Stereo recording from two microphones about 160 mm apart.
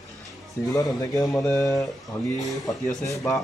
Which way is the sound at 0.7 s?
20° left (ahead or behind).